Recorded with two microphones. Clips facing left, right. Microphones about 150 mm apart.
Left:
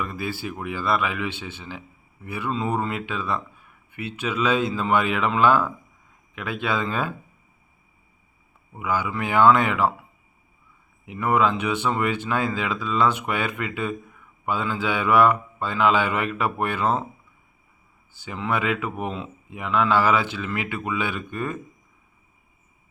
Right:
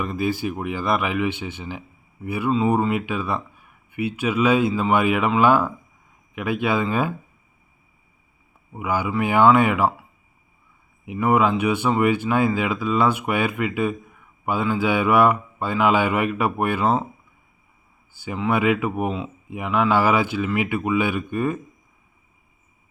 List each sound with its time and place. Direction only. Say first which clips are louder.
0.0 s speech: right 6 dB; 20° right (ahead or behind)
8.7 s speech: right 3 dB; 10° right (ahead or behind)
11.0 s speech: right 2 dB; 10° right (ahead or behind)
18.1 s speech: right 4 dB; 10° right (ahead or behind)